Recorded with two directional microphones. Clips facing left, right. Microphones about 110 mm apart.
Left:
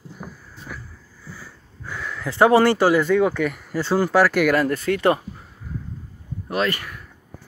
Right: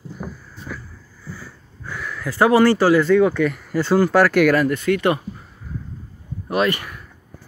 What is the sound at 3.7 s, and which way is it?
Speech, centre (ahead or behind).